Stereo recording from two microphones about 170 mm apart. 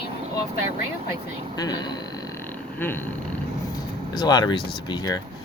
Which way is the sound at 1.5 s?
20° left (ahead or behind).